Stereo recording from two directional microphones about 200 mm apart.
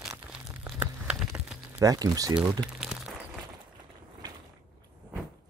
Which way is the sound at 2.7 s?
5° right (ahead or behind).